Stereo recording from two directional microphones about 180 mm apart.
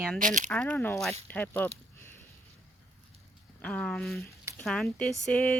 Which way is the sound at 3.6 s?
5° left (ahead or behind).